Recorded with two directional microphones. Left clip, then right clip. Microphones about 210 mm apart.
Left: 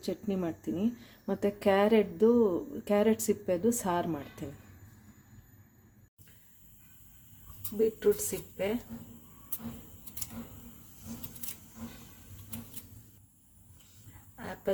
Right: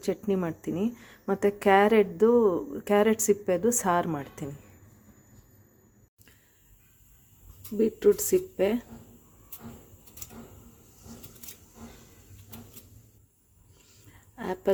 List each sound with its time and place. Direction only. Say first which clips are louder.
0.0 s speech: right 6 dB; 5° right (ahead or behind)
7.8 s speech: right 4 dB; 40° right (ahead or behind)
14.3 s speech: right 8 dB; 40° right (ahead or behind)